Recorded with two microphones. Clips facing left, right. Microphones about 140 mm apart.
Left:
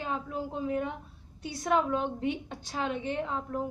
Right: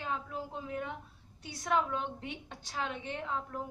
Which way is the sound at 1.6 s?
15° left (ahead or behind).